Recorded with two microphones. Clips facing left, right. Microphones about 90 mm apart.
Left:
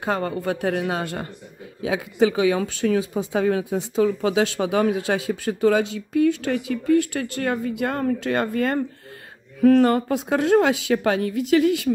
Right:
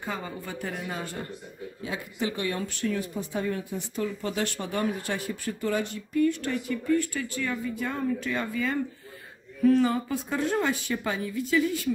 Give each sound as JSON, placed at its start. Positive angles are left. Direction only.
{"t": 0.0, "sound": "a woman's voice", "side_deg": 70}
{"t": 1.8, "sound": "a woman's voice", "side_deg": 90}